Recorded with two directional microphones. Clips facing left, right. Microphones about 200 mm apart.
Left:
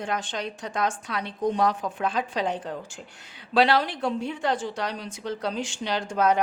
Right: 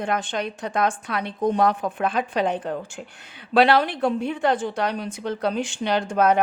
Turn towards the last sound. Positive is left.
turn(degrees=-60)  # may be behind; listen again after turning